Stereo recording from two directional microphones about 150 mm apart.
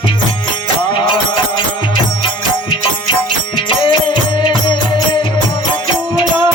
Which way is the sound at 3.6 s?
30° left (ahead or behind).